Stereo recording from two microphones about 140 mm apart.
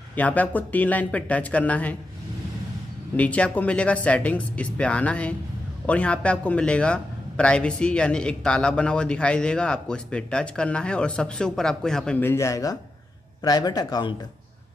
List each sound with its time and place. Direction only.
0.1 s a man's voice: 10° left (ahead or behind)
3.2 s a man's voice: 10° left (ahead or behind); by 14.1 s 30° left (ahead or behind)